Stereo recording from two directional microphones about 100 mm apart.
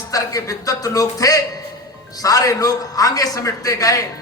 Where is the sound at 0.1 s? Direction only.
35° left (ahead or behind).